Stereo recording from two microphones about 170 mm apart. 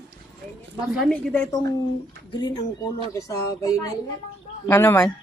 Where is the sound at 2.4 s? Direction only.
25° left (ahead or behind).